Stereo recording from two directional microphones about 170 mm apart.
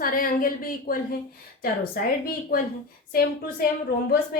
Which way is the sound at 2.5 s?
60° left (ahead or behind).